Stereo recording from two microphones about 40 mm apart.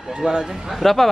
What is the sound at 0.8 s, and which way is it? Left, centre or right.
Speech, centre.